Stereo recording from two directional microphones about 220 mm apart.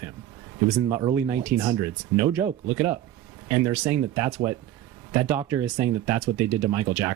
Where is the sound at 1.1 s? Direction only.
10° right (ahead or behind).